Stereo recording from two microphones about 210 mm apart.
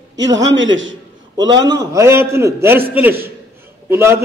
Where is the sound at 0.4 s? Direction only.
60° right (ahead or behind).